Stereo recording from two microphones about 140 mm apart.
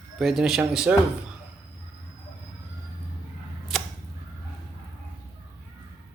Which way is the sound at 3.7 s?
Centre (ahead or behind).